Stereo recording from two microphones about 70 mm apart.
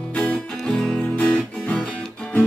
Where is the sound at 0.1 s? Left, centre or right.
Centre.